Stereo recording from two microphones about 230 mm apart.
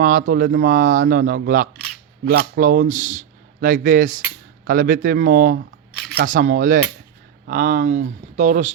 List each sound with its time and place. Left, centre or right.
0.0 s speech: right